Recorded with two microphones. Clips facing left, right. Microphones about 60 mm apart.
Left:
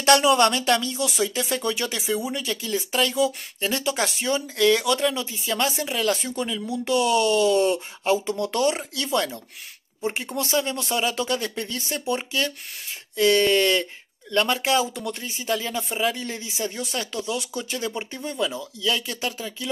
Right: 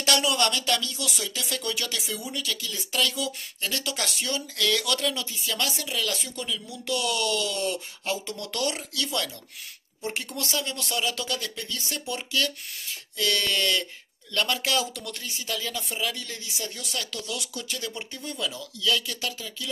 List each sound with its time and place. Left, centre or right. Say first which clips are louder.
0.0 s speech: left 7 dB; left